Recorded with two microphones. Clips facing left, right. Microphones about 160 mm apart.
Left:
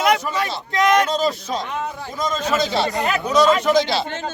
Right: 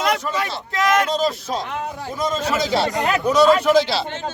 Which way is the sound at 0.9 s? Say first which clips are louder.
Left 1 dB; centre (ahead or behind).